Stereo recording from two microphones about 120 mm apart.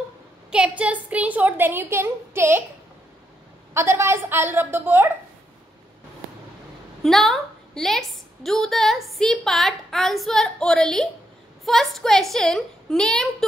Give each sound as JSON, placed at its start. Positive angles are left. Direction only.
{"t": 0.5, "sound": "a woman's voice", "side_deg": -10}
{"t": 3.7, "sound": "a woman's voice", "side_deg": -20}
{"t": 7.0, "sound": "a woman's voice", "side_deg": 0}